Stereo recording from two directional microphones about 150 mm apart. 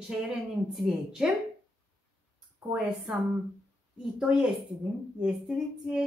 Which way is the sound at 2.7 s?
5° right (ahead or behind).